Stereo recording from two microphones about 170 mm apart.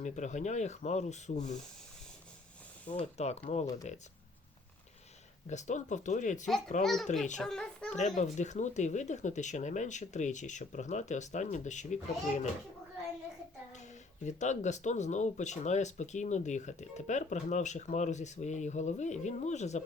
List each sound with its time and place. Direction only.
0.0 s speech: 45° left (ahead or behind)
2.8 s speech: 40° left (ahead or behind)
5.5 s speech: 45° left (ahead or behind)
6.8 s a child's voice: centre (ahead or behind)
7.9 s speech: 45° left (ahead or behind)
14.3 s speech: 45° left (ahead or behind)